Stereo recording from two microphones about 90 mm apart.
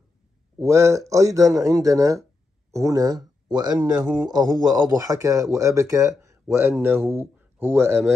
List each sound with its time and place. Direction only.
0.6 s a man's voice: 30° right (ahead or behind)